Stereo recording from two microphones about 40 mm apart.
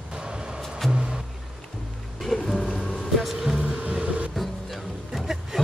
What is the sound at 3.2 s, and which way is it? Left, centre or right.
Music, centre.